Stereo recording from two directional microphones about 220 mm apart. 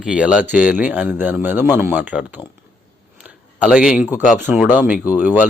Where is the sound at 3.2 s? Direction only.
5° right (ahead or behind).